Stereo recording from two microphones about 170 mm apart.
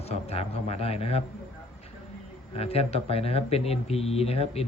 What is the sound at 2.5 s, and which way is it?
Speech, 35° left (ahead or behind).